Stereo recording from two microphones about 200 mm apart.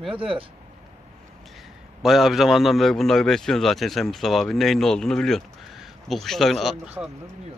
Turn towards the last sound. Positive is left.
turn(degrees=0)  # may be behind; listen again after turning